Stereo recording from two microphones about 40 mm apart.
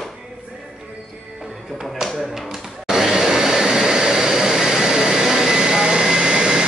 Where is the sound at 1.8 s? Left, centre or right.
Centre.